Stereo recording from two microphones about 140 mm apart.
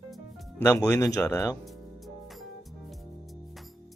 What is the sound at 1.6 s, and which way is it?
Music, centre (ahead or behind).